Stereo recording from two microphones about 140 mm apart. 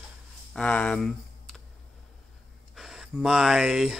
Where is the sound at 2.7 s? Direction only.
5° right (ahead or behind).